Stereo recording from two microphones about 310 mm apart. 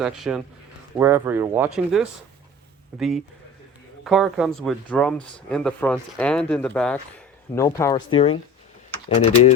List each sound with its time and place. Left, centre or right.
0.0 s speech: centre